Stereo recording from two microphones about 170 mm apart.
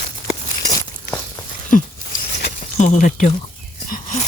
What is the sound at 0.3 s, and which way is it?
Walk, 20° left (ahead or behind).